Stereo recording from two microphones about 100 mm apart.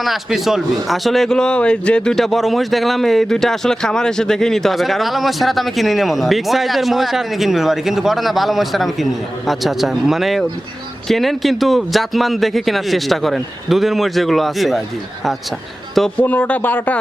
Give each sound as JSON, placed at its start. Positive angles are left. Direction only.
{"t": 0.0, "sound": "a man's voice", "side_deg": 0}
{"t": 16.2, "sound": "speech", "side_deg": 15}